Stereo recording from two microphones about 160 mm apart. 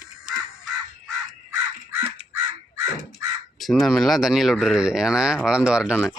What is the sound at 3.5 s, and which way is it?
Speech, centre (ahead or behind).